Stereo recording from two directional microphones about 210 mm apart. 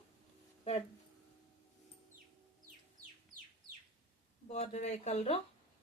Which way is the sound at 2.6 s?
40° right (ahead or behind).